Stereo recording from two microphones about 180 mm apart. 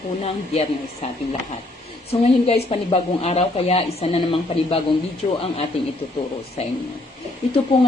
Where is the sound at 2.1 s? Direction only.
35° left (ahead or behind).